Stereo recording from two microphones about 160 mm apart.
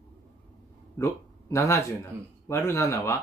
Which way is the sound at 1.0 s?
15° left (ahead or behind).